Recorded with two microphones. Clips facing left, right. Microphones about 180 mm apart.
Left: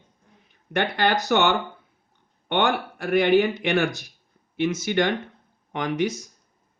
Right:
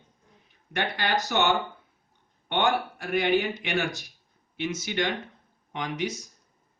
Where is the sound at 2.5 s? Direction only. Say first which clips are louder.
Left 2 dB; 55° left (ahead or behind).